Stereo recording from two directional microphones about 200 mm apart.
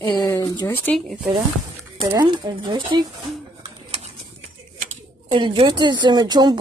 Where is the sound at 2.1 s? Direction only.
20° right (ahead or behind).